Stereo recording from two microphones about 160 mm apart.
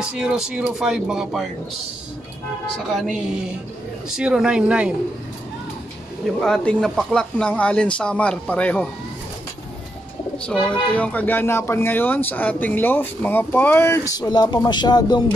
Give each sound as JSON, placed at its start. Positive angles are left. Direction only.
{"t": 0.2, "sound": "speech", "side_deg": -5}
{"t": 2.9, "sound": "speech", "side_deg": 0}
{"t": 4.2, "sound": "speech", "side_deg": -5}
{"t": 6.4, "sound": "speech", "side_deg": 5}
{"t": 10.3, "sound": "speech", "side_deg": 5}